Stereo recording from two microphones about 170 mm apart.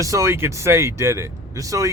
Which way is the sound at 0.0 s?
20° right (ahead or behind).